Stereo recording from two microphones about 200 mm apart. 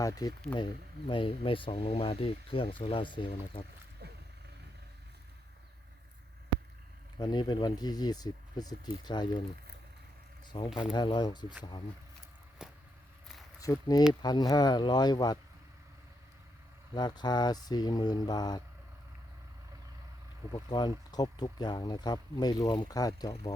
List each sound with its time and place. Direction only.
0.0 s speech: 15° left (ahead or behind)
4.0 s wild animals: 55° right (ahead or behind)
7.2 s speech: 20° left (ahead or behind)
10.5 s speech: 25° left (ahead or behind)
12.6 s vehicle: 5° right (ahead or behind)
13.6 s speech: 15° left (ahead or behind)
16.9 s speech: 20° left (ahead or behind)
20.5 s speech: 20° left (ahead or behind)